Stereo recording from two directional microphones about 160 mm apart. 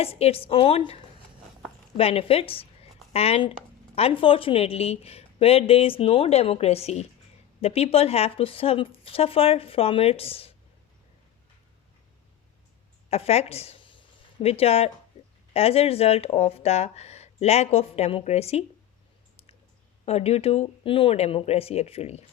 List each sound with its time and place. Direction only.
0.0 s a woman's voice: 40° left (ahead or behind)
13.1 s a sound: 40° left (ahead or behind)
15.5 s a woman's voice: 40° left (ahead or behind)
20.1 s a woman's voice: 40° left (ahead or behind)